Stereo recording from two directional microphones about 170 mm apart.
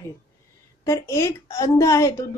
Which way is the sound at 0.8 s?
20° left (ahead or behind).